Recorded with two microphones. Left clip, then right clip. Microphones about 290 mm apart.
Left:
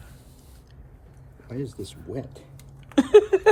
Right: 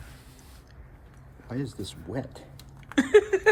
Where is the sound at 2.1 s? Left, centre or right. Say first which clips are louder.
Right 1 dB; right.